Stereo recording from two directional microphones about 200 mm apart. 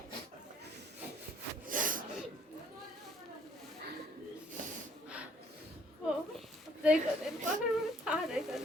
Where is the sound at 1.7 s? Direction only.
45° right (ahead or behind).